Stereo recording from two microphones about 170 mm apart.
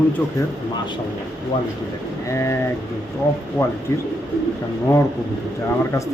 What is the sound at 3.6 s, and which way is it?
Speech, 15° left (ahead or behind).